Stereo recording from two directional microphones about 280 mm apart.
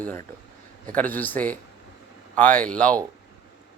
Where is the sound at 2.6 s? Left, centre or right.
Centre.